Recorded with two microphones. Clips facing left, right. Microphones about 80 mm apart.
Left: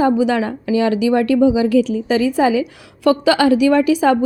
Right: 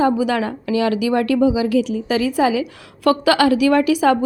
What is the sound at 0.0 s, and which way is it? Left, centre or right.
A woman's voice, left.